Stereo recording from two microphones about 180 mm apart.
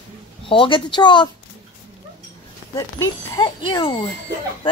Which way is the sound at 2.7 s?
20° left (ahead or behind).